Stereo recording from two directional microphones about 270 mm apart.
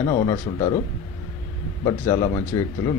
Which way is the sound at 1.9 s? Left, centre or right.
Centre.